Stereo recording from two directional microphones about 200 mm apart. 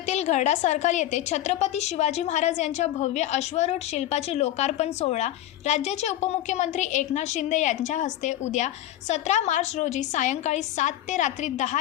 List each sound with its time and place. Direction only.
0.1 s a woman's voice: 35° left (ahead or behind)